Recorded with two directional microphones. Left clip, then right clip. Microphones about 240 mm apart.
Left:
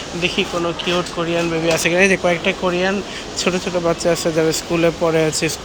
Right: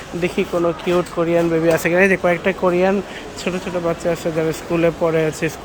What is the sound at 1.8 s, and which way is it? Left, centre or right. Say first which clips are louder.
Speech: even; centre.